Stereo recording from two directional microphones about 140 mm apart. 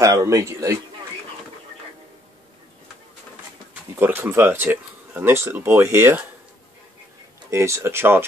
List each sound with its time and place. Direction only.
0.0 s a man's voice: 25° right (ahead or behind)
4.0 s speech: 15° right (ahead or behind)
7.5 s speech: 20° right (ahead or behind)